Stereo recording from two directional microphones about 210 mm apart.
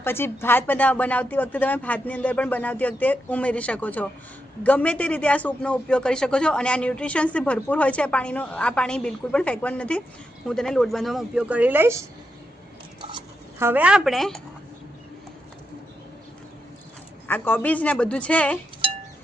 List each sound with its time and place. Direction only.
0.0 s a man's voice: 10° left (ahead or behind); by 11.9 s 10° right (ahead or behind)
13.0 s a sound: 25° right (ahead or behind)
13.6 s a man's voice: 10° right (ahead or behind)
17.2 s speech: 10° left (ahead or behind)